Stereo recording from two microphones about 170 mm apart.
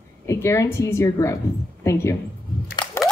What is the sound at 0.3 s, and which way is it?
A man's voice, 15° left (ahead or behind).